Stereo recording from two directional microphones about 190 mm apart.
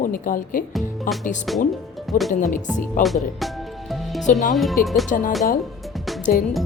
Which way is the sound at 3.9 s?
Centre (ahead or behind).